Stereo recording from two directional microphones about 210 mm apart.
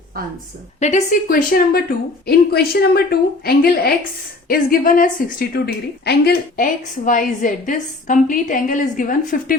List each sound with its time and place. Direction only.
0.8 s a woman's voice: 35° left (ahead or behind)